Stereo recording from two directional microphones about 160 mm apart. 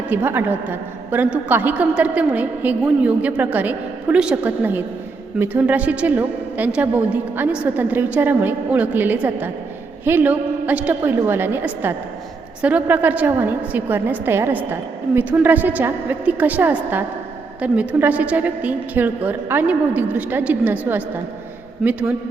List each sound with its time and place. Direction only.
0.1 s a woman's voice: 15° right (ahead or behind)